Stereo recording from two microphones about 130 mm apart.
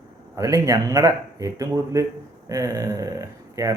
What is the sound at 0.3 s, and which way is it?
Speech, 25° right (ahead or behind).